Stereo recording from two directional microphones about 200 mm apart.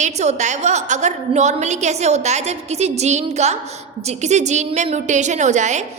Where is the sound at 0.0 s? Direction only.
35° right (ahead or behind).